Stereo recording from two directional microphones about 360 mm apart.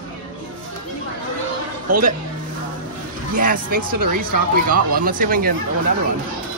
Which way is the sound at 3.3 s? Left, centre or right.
Right.